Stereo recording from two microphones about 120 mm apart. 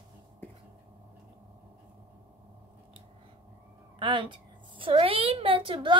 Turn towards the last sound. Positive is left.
turn(degrees=-45)  # may be behind; listen again after turning